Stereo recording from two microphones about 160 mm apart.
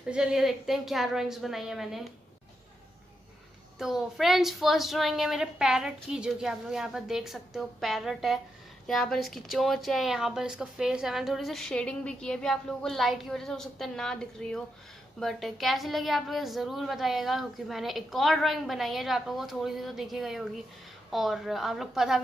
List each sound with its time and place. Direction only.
0.1 s a woman's voice: 5° right (ahead or behind)
3.7 s a woman's voice: centre (ahead or behind)